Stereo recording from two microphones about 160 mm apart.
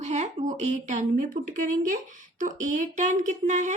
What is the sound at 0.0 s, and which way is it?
A woman's voice, 45° right (ahead or behind).